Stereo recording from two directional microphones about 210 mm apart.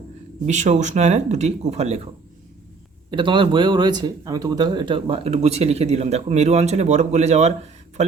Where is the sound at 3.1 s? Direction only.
25° right (ahead or behind).